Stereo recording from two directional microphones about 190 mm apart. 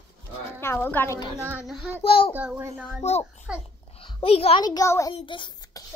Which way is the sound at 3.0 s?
35° left (ahead or behind).